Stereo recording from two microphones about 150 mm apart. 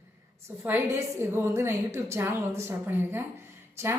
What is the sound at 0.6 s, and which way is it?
A woman's voice, 15° right (ahead or behind).